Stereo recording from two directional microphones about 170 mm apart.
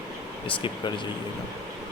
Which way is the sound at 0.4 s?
30° left (ahead or behind).